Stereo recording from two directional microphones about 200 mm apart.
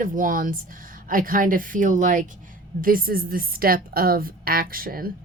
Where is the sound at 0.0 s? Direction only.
40° right (ahead or behind).